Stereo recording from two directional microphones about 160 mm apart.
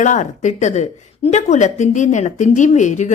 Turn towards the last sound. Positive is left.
turn(degrees=50)  # may be behind; listen again after turning